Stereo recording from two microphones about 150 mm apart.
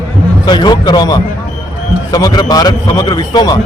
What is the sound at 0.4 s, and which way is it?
A man's voice, 30° left (ahead or behind).